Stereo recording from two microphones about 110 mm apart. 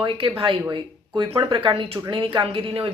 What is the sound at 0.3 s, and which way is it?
A woman's voice, 55° right (ahead or behind).